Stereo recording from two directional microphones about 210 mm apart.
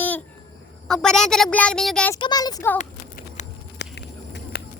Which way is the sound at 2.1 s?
20° left (ahead or behind).